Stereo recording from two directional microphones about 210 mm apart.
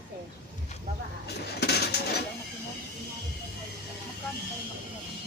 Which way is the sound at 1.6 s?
50° left (ahead or behind).